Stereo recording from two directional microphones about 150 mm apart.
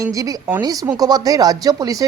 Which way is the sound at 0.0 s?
20° right (ahead or behind).